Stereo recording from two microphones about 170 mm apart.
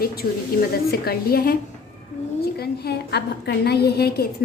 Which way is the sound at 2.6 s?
75° left (ahead or behind).